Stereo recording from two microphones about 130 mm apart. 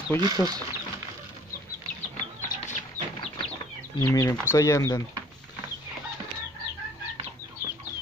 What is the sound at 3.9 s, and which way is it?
Speech, 25° left (ahead or behind).